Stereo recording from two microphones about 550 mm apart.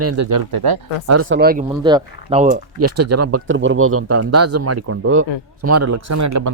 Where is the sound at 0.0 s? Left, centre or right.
Right.